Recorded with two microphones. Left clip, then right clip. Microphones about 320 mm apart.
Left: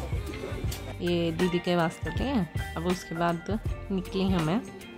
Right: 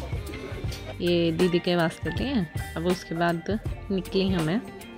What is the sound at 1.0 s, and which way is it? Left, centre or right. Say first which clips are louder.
Speech: right 5 dB; centre.